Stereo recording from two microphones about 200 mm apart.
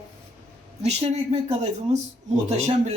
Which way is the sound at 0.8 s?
30° right (ahead or behind).